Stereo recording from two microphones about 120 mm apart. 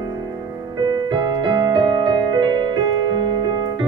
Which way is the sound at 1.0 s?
35° right (ahead or behind).